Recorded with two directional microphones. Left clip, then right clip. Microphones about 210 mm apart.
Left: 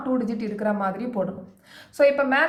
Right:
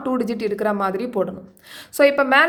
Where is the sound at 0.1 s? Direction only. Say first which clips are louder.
Right 5 dB; 50° right (ahead or behind).